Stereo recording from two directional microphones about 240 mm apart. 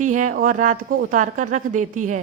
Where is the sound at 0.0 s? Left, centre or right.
Right.